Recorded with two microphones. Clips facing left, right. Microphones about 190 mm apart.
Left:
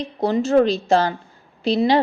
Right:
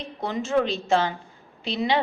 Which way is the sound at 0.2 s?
35° left (ahead or behind).